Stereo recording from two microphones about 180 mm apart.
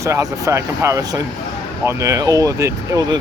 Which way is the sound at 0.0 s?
20° right (ahead or behind).